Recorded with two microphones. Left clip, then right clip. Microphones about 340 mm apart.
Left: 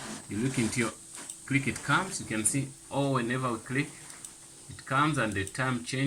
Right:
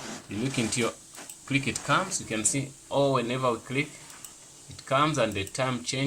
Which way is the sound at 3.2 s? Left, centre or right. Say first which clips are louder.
Right 4 dB; centre.